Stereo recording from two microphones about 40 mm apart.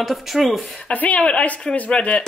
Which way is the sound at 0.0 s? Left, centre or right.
Centre.